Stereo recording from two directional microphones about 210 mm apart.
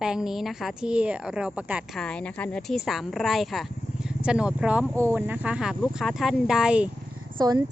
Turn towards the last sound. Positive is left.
turn(degrees=-20)  # may be behind; listen again after turning